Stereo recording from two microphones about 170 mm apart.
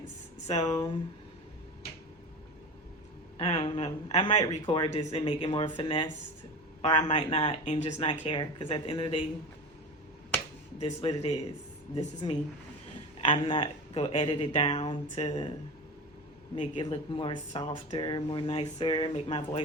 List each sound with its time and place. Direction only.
0.6 s a woman's voice: 20° left (ahead or behind)
3.3 s speech: 30° left (ahead or behind)
10.8 s speech: 35° left (ahead or behind)
11.9 s a woman's voice: 25° left (ahead or behind)
16.6 s speech: 30° left (ahead or behind)